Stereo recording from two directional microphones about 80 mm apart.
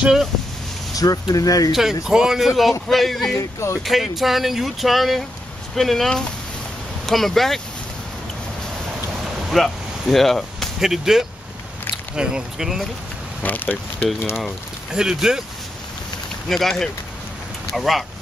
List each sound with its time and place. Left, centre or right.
0.9 s speech: left
1.7 s speech: centre
3.3 s speech: left
3.8 s speech: centre
9.2 s a sound: centre
12.2 s speech: centre
13.4 s speech: left
14.3 s speech: centre
16.4 s speech: centre